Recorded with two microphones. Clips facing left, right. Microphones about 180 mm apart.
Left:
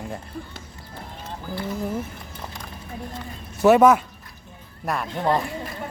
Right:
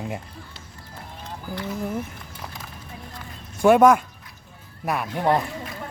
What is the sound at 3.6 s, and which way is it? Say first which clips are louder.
Speech: even; 5° left (ahead or behind).